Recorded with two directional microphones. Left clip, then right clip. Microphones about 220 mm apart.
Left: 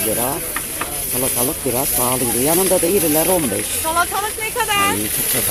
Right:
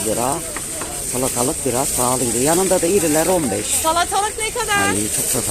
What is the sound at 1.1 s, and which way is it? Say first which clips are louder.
Speech: right 3 dB; centre (ahead or behind).